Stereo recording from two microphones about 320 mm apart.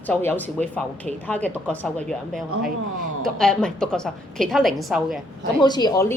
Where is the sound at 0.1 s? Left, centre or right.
Centre.